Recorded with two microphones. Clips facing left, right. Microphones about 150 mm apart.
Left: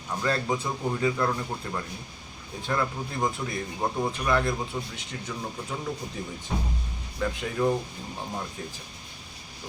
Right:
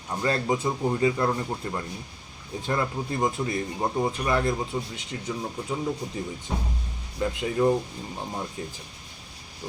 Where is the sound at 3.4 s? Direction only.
25° right (ahead or behind).